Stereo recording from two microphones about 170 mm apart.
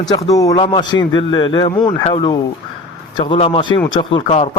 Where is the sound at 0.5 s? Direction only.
30° left (ahead or behind).